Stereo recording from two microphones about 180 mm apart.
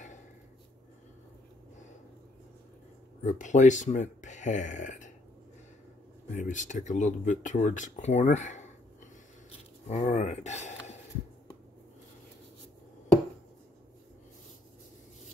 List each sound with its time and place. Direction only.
3.3 s speech: 45° left (ahead or behind)
6.3 s speech: 45° left (ahead or behind)
9.8 s speech: 40° left (ahead or behind)